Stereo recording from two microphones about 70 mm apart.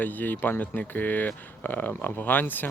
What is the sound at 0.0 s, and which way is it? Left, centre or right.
Speech, left.